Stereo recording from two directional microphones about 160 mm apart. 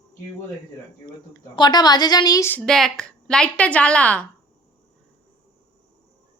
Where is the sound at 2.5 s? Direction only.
5° left (ahead or behind).